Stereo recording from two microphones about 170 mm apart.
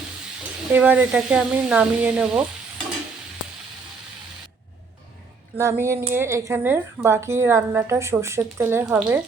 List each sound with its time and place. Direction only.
0.7 s speech: 10° right (ahead or behind)
5.5 s speech: 15° right (ahead or behind)